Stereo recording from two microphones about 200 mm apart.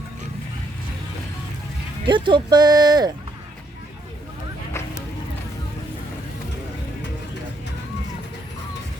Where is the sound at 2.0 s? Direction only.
25° right (ahead or behind).